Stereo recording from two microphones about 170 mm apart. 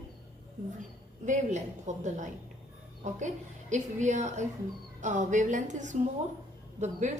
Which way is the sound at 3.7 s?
45° right (ahead or behind).